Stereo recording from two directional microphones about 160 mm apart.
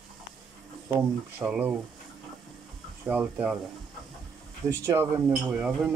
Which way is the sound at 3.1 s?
10° right (ahead or behind).